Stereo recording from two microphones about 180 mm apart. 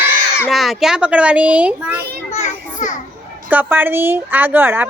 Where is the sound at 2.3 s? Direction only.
40° left (ahead or behind).